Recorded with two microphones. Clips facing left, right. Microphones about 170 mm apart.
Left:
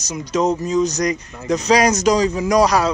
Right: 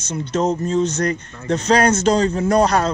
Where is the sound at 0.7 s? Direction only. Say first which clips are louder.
Left 1 dB; 30° right (ahead or behind).